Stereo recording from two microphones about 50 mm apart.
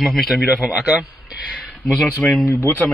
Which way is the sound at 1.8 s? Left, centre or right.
Centre.